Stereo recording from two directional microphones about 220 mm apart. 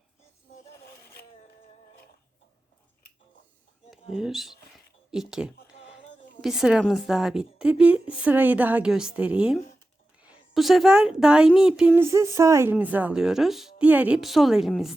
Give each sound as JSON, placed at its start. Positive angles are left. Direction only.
{"t": 3.9, "sound": "speech", "side_deg": 0}
{"t": 4.7, "sound": "a sound", "side_deg": 0}
{"t": 6.4, "sound": "a woman's voice", "side_deg": 0}